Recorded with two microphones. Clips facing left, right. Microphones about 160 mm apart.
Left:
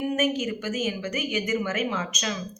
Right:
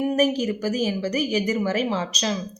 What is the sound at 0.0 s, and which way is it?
Speech, 35° right (ahead or behind).